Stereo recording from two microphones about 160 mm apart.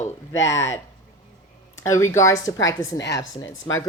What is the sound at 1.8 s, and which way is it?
Speech, 20° left (ahead or behind).